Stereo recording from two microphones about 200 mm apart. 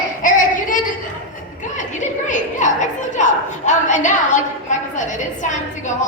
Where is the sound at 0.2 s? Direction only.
40° left (ahead or behind).